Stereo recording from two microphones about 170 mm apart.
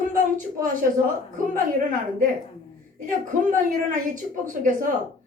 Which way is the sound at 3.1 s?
50° right (ahead or behind).